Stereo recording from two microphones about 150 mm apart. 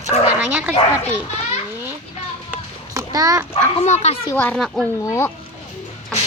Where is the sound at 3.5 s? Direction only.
45° left (ahead or behind).